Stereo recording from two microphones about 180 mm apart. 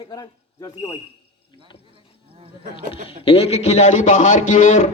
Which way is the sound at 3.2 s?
35° left (ahead or behind).